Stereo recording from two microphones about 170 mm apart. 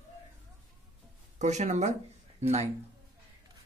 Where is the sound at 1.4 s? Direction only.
45° right (ahead or behind).